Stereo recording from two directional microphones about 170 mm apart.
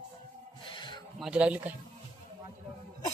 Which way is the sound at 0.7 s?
30° left (ahead or behind).